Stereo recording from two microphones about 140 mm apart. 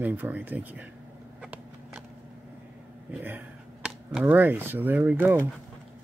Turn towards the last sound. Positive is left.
turn(degrees=-15)  # may be behind; listen again after turning